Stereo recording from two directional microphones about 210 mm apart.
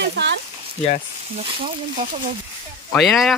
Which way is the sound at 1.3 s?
35° right (ahead or behind).